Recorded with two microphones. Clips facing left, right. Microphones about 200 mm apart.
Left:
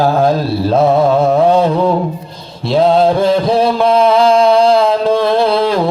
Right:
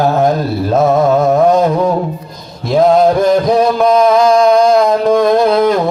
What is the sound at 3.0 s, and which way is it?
Music, 30° left (ahead or behind).